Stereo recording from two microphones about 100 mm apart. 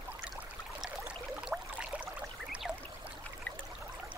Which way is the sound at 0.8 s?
5° right (ahead or behind).